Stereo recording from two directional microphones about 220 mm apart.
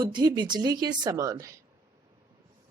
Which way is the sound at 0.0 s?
20° right (ahead or behind).